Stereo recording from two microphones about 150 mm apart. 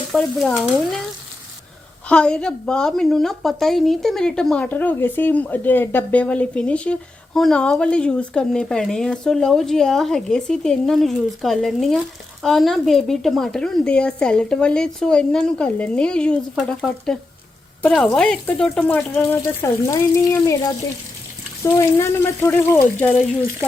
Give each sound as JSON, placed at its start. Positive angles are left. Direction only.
{"t": 0.1, "sound": "a woman's voice", "side_deg": 0}
{"t": 2.0, "sound": "a woman's voice", "side_deg": 5}